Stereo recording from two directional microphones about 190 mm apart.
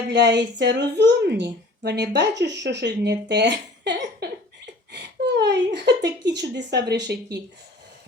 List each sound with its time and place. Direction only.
0.1 s speech: 60° right (ahead or behind)
4.9 s a sound: 65° right (ahead or behind)
6.0 s speech: 65° right (ahead or behind)